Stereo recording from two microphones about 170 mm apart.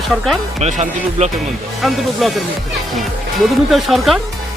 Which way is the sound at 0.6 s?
40° right (ahead or behind).